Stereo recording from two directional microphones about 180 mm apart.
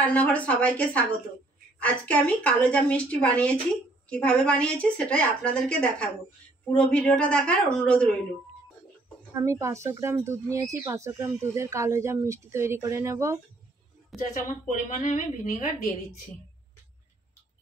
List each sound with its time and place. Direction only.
0.0 s a woman's voice: 5° left (ahead or behind)
9.3 s speech: 15° right (ahead or behind)
14.3 s a woman's voice: 40° left (ahead or behind)